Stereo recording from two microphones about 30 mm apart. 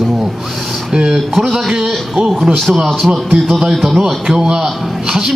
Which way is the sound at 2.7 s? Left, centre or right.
Right.